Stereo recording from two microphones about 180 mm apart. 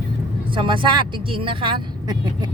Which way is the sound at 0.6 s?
30° right (ahead or behind).